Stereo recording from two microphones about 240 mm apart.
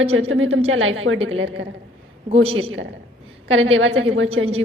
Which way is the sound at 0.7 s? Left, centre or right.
Right.